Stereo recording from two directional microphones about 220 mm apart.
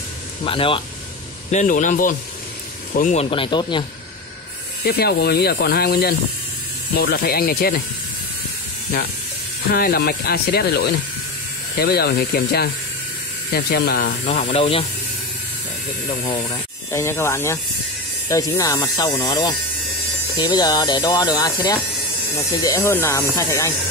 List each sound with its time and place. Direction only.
0.4 s speech: 25° left (ahead or behind)
1.5 s speech: 35° left (ahead or behind)
4.8 s speech: 45° left (ahead or behind)
9.7 s speech: 40° left (ahead or behind)
14.2 s speech: 30° left (ahead or behind)
16.1 s speech: 20° left (ahead or behind)